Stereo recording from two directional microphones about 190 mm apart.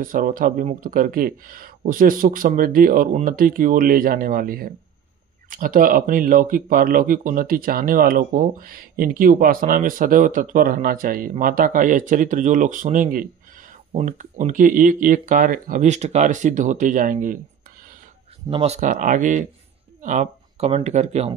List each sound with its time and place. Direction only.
0.0 s speech: 45° right (ahead or behind)
18.5 s speech: 30° right (ahead or behind)